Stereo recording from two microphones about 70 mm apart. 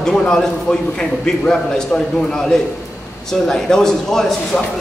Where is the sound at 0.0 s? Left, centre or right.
Centre.